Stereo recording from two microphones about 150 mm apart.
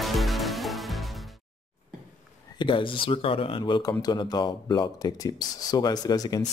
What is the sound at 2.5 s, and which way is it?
Speech, 35° left (ahead or behind).